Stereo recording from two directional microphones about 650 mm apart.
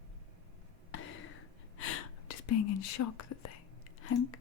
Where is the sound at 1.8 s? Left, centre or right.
Left.